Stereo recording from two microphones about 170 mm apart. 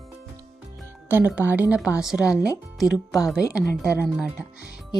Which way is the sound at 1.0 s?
10° right (ahead or behind).